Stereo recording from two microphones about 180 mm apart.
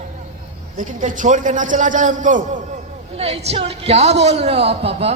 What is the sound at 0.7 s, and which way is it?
A man's voice, 45° right (ahead or behind).